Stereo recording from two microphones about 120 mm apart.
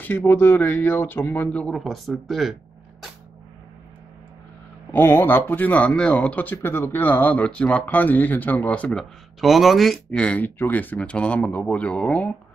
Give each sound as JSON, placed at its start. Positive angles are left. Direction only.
{"t": 0.0, "sound": "speech", "side_deg": 15}
{"t": 4.9, "sound": "speech", "side_deg": 15}
{"t": 9.4, "sound": "speech", "side_deg": 0}